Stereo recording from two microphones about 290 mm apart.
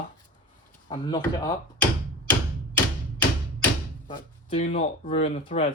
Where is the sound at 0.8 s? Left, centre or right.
Centre.